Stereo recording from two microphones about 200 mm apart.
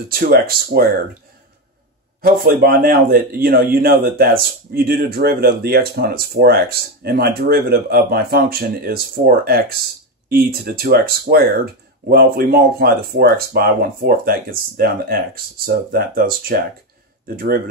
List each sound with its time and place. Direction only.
0.1 s a man's voice: 50° right (ahead or behind)
2.2 s a man's voice: 50° right (ahead or behind)